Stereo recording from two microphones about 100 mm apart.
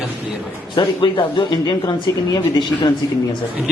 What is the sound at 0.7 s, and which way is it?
Speech, 55° left (ahead or behind).